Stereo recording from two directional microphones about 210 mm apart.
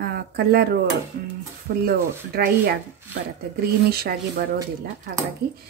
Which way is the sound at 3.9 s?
45° right (ahead or behind).